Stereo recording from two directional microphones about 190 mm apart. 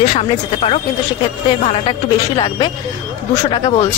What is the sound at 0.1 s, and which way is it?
Speech, 30° left (ahead or behind).